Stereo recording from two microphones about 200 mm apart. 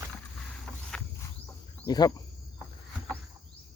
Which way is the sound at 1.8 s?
20° left (ahead or behind).